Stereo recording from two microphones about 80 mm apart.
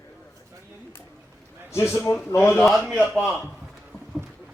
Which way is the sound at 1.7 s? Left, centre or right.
Left.